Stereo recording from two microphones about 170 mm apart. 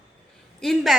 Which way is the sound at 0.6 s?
Centre (ahead or behind).